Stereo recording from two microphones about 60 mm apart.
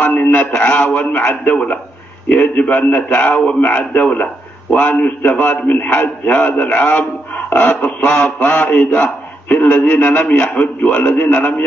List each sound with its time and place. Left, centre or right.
0.0 s a sound: left
0.9 s mantra: left
2.2 s a man's voice: left
6.8 s mantra: left
8.4 s a man's voice: left
10.1 s mantra: left
10.6 s a man's voice: left